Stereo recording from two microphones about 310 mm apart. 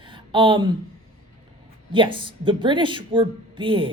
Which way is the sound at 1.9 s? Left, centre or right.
Centre.